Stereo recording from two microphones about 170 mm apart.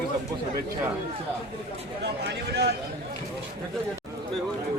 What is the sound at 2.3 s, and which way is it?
Speech, 75° right (ahead or behind).